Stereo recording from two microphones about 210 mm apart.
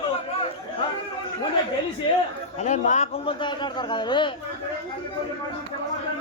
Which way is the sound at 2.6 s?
35° left (ahead or behind).